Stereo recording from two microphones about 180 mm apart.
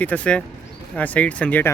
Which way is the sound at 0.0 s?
10° left (ahead or behind).